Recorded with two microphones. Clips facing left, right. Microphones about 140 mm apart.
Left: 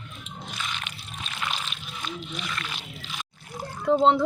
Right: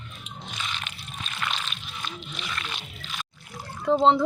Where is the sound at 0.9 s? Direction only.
15° left (ahead or behind).